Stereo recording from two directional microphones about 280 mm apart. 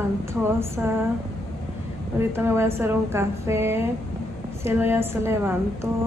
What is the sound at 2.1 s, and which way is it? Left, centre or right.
Speech, centre.